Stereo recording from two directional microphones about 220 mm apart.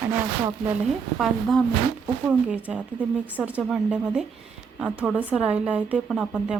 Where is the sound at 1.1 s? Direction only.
Centre (ahead or behind).